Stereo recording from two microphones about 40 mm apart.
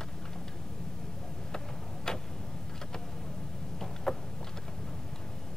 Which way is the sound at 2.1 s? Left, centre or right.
Centre.